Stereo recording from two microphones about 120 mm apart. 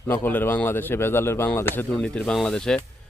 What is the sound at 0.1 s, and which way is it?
Speech, 15° left (ahead or behind).